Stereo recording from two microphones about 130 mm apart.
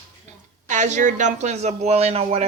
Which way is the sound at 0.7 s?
70° right (ahead or behind).